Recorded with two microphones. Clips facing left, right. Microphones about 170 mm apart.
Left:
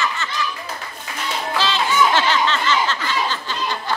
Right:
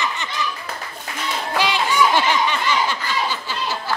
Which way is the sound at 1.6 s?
15° right (ahead or behind).